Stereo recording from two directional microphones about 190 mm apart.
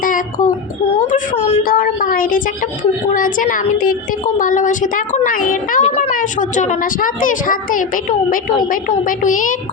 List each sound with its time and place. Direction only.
0.0 s child singing: 45° left (ahead or behind)
0.9 s speech: 40° left (ahead or behind)
1.6 s a child's voice: 50° left (ahead or behind)